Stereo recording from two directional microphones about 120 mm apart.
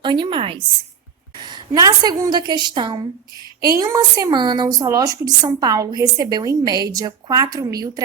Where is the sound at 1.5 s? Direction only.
35° right (ahead or behind).